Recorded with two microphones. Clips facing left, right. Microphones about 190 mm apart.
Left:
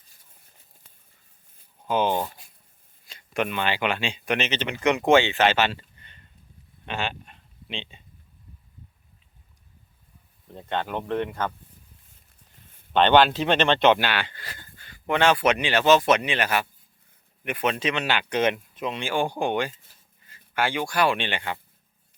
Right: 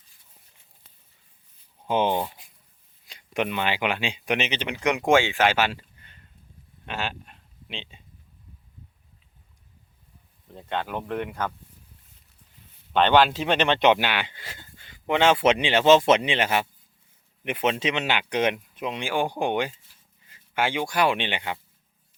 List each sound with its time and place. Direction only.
1.9 s speech: 20° right (ahead or behind); by 8.0 s 5° right (ahead or behind)
10.5 s speech: centre (ahead or behind)
12.9 s speech: 5° right (ahead or behind)